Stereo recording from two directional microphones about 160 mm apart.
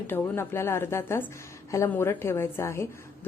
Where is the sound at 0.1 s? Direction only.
15° left (ahead or behind).